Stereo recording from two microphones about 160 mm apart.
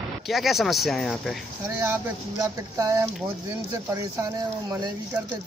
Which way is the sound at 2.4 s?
20° right (ahead or behind).